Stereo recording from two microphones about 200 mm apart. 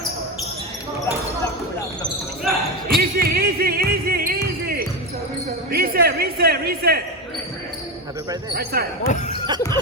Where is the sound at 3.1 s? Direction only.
50° right (ahead or behind).